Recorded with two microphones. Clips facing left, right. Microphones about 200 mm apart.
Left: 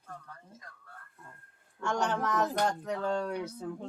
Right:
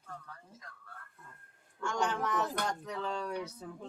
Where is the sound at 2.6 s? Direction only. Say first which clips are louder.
Left 6 dB; 50° left (ahead or behind).